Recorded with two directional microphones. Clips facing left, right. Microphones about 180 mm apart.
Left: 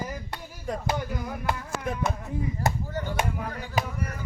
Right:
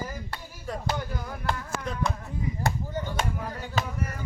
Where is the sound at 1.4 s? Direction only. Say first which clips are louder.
Even; 15° left (ahead or behind).